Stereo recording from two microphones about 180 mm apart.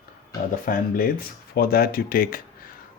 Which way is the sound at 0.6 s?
55° left (ahead or behind).